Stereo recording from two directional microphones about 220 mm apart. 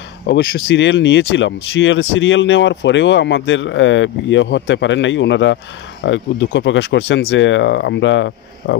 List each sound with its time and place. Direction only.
0.3 s speech: 40° left (ahead or behind)
0.7 s speech: 55° left (ahead or behind)